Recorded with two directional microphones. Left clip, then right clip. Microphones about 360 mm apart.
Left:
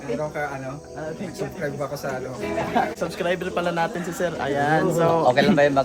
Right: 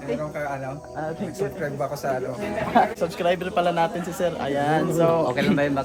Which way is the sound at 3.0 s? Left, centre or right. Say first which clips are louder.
Right 2 dB; centre.